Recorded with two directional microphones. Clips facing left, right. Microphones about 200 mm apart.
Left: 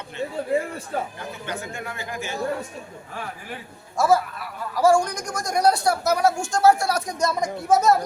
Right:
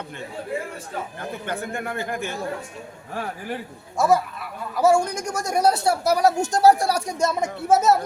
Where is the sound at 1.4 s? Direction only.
55° right (ahead or behind).